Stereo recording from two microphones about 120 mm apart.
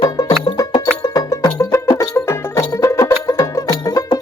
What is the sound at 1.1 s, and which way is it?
Music, 30° left (ahead or behind).